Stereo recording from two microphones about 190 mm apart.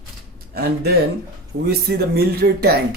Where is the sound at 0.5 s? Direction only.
55° right (ahead or behind).